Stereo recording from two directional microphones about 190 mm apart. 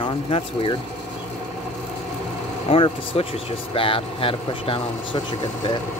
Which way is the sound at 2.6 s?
30° left (ahead or behind).